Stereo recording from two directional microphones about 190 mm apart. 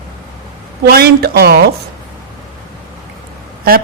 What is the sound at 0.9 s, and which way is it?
Speech, 55° right (ahead or behind).